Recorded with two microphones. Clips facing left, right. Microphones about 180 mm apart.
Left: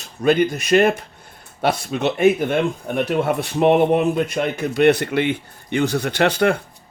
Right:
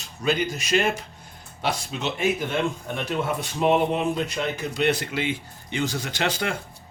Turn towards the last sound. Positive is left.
turn(degrees=60)  # may be behind; listen again after turning